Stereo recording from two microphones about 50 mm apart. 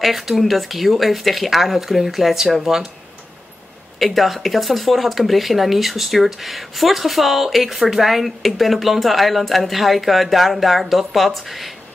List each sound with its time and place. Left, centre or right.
0.0 s speech: centre
4.0 s speech: centre